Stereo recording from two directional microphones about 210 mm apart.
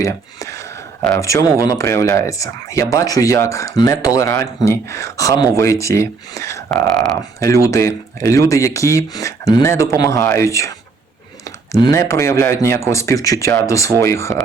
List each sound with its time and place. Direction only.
0.0 s speech: 15° left (ahead or behind)
6.8 s speech: centre (ahead or behind)
7.3 s speech: 15° left (ahead or behind)